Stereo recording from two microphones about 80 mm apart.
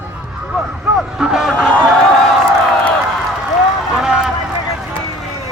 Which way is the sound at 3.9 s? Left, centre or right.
Centre.